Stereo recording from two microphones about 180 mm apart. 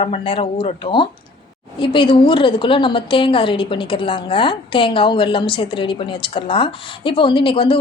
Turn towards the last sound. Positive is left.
turn(degrees=30)  # may be behind; listen again after turning